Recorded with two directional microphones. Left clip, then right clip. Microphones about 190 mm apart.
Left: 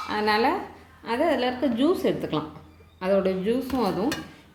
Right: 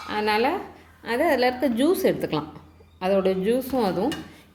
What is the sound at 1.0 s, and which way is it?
A woman's voice, 20° right (ahead or behind).